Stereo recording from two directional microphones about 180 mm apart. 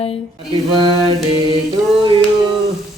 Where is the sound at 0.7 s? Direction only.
25° right (ahead or behind).